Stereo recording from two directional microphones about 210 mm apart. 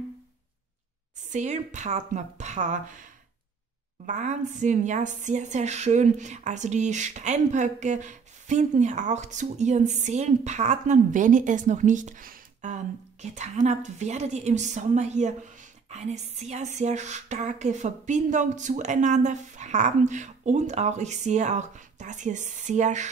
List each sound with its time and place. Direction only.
1.3 s a woman's voice: 35° right (ahead or behind)